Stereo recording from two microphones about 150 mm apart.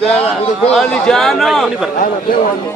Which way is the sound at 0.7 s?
5° left (ahead or behind).